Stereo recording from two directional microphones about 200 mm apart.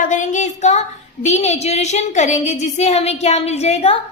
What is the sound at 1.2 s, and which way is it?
A woman's voice, 35° left (ahead or behind).